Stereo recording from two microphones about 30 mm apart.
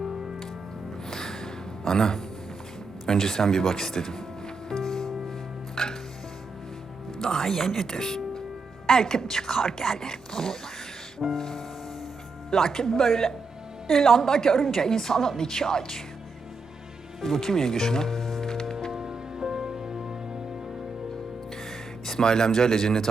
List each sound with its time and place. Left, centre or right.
1.1 s gasp: centre
3.1 s speech: centre
4.7 s music: centre
5.7 s chopping: centre
7.2 s speech: centre
14.5 s speech: centre
17.2 s speech: centre
18.2 s music: centre
18.9 s music: right
21.7 s speech: centre